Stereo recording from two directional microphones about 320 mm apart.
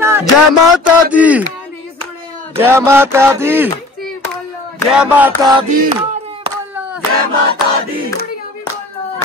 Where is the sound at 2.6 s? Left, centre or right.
Centre.